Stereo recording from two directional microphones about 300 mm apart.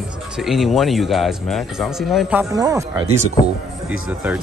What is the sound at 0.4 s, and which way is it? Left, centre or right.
Speech, centre.